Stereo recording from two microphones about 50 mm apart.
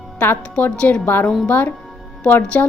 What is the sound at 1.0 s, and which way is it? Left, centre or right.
A woman's voice, left.